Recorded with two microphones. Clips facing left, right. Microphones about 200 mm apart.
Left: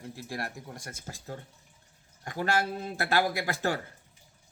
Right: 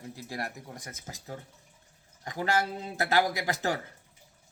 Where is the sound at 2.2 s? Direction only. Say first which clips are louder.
Even; 20° right (ahead or behind).